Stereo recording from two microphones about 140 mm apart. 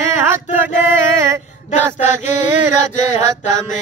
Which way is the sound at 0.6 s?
15° right (ahead or behind).